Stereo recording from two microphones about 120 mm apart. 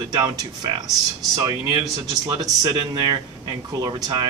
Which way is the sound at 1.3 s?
30° right (ahead or behind).